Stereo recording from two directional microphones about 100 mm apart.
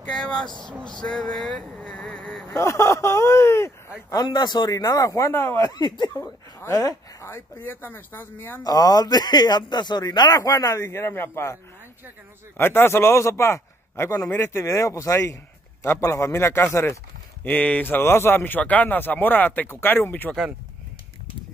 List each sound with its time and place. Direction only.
0.0 s speech: 5° left (ahead or behind)
0.8 s a sound: 10° left (ahead or behind)
2.5 s speech: 30° left (ahead or behind)
4.1 s a man's voice: 45° left (ahead or behind); by 5.6 s 25° left (ahead or behind)
5.6 s speech: 45° left (ahead or behind)
6.1 s speech: 30° left (ahead or behind)
7.2 s speech: 20° left (ahead or behind)
8.6 s a man's voice: 40° left (ahead or behind); by 11.5 s 25° left (ahead or behind)
12.5 s speech: 25° left (ahead or behind)
17.4 s speech: 15° left (ahead or behind)